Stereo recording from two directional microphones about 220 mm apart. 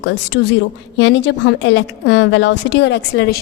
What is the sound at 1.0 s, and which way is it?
A woman's voice, 55° left (ahead or behind).